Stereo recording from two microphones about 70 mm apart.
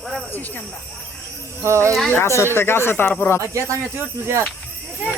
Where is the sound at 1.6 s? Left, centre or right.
Right.